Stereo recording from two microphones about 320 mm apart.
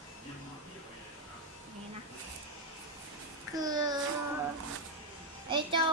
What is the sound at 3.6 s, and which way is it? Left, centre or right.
Speech, centre.